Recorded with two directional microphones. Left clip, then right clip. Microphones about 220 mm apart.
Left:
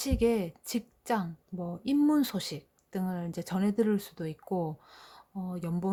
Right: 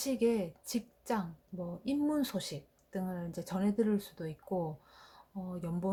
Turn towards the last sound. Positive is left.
turn(degrees=30)  # may be behind; listen again after turning